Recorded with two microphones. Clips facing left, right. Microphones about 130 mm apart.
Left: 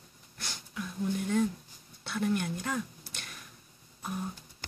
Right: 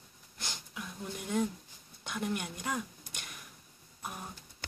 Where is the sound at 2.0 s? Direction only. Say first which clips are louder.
Left 5 dB; 15° right (ahead or behind).